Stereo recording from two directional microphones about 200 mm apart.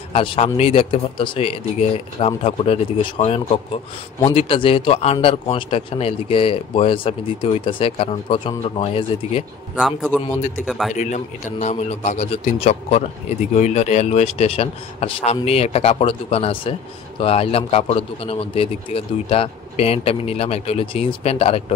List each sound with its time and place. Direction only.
0.1 s speech: 25° left (ahead or behind)
9.8 s a man's voice: centre (ahead or behind)
11.0 s speech: 35° left (ahead or behind)